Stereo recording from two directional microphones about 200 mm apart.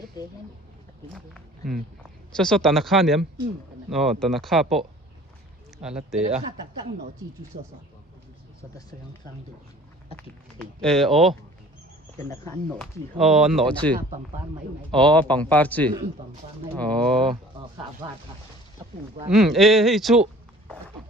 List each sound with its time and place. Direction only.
2.3 s speech: 5° left (ahead or behind)
5.8 s speech: 30° right (ahead or behind)
10.6 s speech: centre (ahead or behind)
12.5 s speech: centre (ahead or behind)
14.9 s speech: 5° left (ahead or behind)
19.3 s speech: centre (ahead or behind)